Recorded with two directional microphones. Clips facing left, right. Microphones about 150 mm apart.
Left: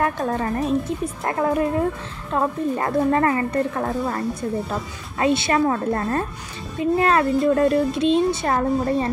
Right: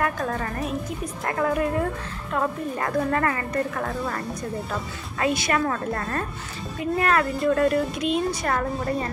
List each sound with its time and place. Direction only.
0.0 s speech: 25° left (ahead or behind)